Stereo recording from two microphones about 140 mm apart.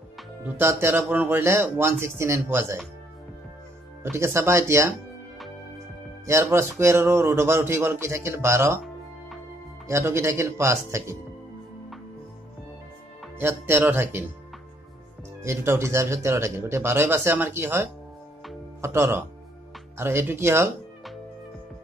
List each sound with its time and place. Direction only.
0.4 s speech: 15° right (ahead or behind)
4.0 s speech: 15° right (ahead or behind)
6.2 s speech: 20° right (ahead or behind)
9.8 s speech: 20° right (ahead or behind)
13.4 s speech: 15° right (ahead or behind)
15.4 s speech: 20° right (ahead or behind)